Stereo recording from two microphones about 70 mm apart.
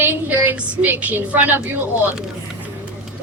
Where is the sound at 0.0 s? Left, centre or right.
Right.